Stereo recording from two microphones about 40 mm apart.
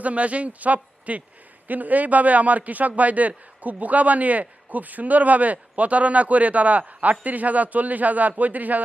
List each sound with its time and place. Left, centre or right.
0.0 s a man's voice: right